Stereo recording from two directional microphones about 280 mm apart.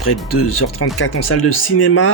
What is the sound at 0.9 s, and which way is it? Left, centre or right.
Speech, left.